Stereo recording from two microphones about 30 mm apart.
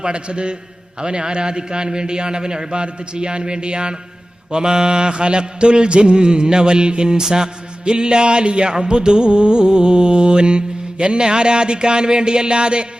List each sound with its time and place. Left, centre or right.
0.0 s music: right
0.9 s a man's voice: right
2.8 s music: right
7.3 s a man's voice: right
7.9 s music: right